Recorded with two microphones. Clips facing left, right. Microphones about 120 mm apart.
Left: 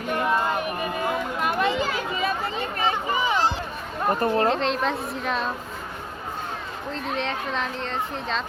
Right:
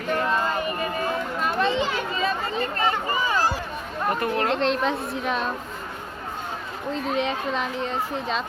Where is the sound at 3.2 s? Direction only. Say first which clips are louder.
Left 1 dB; 25° left (ahead or behind).